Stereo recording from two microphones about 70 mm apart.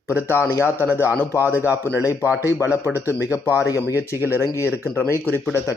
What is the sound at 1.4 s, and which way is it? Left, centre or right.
Speech, right.